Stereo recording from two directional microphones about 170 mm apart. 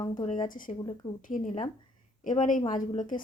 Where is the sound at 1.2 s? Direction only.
50° left (ahead or behind).